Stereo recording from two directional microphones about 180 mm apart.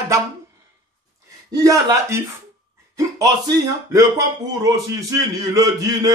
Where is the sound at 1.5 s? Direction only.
20° right (ahead or behind).